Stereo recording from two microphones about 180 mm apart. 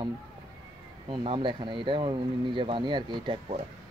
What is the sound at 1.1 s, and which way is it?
Speech, 30° right (ahead or behind).